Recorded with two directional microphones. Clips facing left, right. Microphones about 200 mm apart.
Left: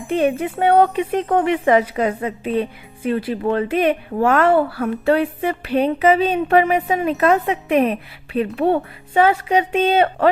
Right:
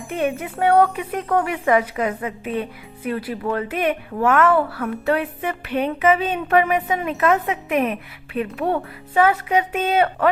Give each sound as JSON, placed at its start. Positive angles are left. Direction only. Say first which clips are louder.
{"t": 0.1, "sound": "speech", "louder": "left 5 dB", "side_deg": 30}